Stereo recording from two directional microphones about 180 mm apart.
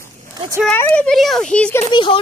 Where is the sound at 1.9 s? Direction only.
25° left (ahead or behind).